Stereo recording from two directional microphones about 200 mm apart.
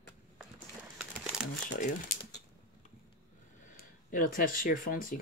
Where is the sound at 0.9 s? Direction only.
5° right (ahead or behind).